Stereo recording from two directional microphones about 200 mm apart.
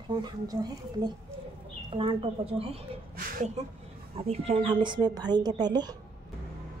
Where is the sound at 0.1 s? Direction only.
20° right (ahead or behind).